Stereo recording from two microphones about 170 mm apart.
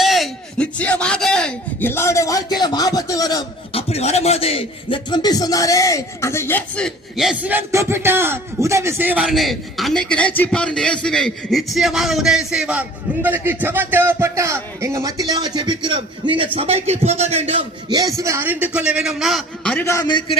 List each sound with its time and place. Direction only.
0.0 s a sound: centre (ahead or behind); by 3.4 s 20° left (ahead or behind)
3.7 s speech: 35° left (ahead or behind); by 9.2 s 10° right (ahead or behind)
9.2 s a man's voice: centre (ahead or behind)
19.8 s a man's voice: 15° left (ahead or behind)